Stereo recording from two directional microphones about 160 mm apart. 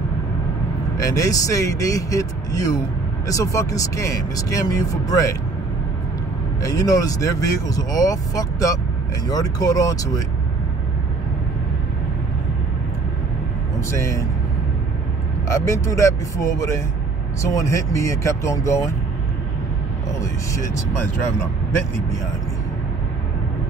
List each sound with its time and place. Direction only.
0.9 s speech: 20° left (ahead or behind)
6.6 s speech: 20° left (ahead or behind)
13.8 s speech: 20° left (ahead or behind)
15.4 s speech: 15° left (ahead or behind)
20.2 s speech: 20° left (ahead or behind)